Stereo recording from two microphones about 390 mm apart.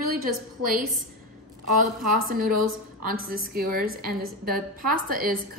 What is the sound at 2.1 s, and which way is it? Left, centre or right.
A woman's voice, right.